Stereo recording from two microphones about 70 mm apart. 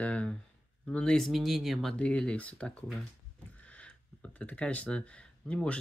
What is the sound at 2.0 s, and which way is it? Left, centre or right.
Speech, centre.